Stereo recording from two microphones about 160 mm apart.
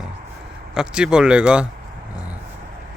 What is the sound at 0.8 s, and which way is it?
Speech, 5° right (ahead or behind).